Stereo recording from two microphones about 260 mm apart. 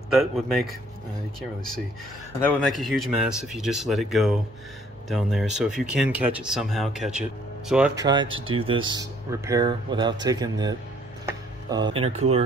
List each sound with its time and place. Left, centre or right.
0.1 s speech: centre
2.4 s speech: centre
8.0 s speech: centre